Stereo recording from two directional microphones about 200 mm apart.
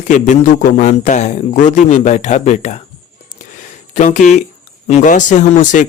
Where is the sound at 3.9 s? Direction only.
40° left (ahead or behind).